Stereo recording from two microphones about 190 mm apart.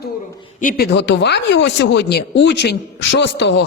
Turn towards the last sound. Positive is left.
turn(degrees=65)  # may be behind; listen again after turning